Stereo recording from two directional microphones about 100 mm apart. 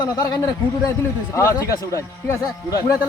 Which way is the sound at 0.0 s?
40° left (ahead or behind).